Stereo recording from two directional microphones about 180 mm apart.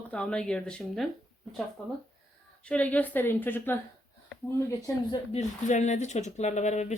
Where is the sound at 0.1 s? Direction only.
5° left (ahead or behind).